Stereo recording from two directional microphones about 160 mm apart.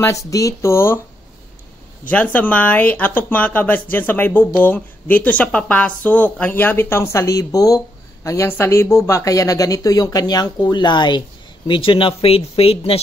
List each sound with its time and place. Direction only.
0.0 s speech: 20° left (ahead or behind)
2.0 s speech: 10° left (ahead or behind); by 13.0 s 35° left (ahead or behind)